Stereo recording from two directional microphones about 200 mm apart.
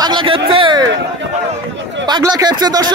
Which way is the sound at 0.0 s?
25° right (ahead or behind).